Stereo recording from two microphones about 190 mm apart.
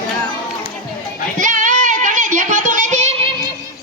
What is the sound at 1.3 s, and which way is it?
Music, 45° right (ahead or behind).